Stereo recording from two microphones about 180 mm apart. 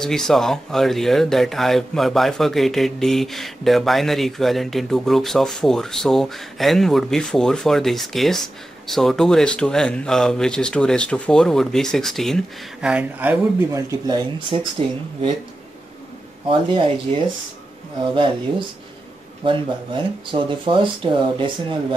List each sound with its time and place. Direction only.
0.0 s speech: centre (ahead or behind); by 15.3 s 25° right (ahead or behind)
16.4 s speech: 30° right (ahead or behind)
19.4 s speech: 30° right (ahead or behind)